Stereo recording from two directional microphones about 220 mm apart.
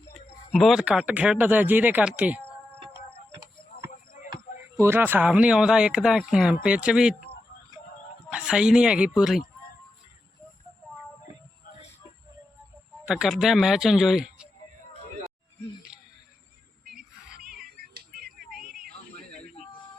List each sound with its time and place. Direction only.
0.5 s speech: centre (ahead or behind)
3.7 s basketball bounce: 40° left (ahead or behind)
4.8 s speech: 10° right (ahead or behind)
8.3 s speech: 5° right (ahead or behind)
13.1 s speech: centre (ahead or behind)
16.9 s child singing: 5° right (ahead or behind)
17.6 s music: 45° right (ahead or behind)
19.3 s a sound: 30° left (ahead or behind)